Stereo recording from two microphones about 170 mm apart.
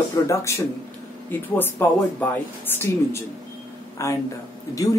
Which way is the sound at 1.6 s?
10° left (ahead or behind).